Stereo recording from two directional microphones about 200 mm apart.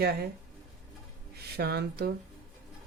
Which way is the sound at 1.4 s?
55° right (ahead or behind).